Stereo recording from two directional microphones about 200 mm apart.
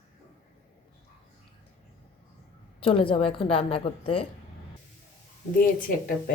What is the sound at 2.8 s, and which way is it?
Speech, 25° left (ahead or behind).